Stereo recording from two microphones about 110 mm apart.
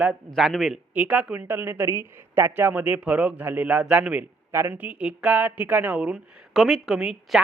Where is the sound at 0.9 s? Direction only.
10° right (ahead or behind).